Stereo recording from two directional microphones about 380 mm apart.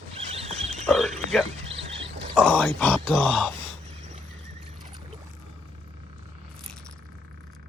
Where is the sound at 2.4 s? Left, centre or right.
Centre.